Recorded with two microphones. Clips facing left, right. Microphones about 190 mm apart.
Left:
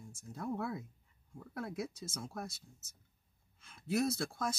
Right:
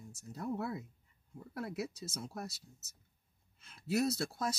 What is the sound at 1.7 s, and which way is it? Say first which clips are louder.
Speech: right 1 dB; 50° left (ahead or behind).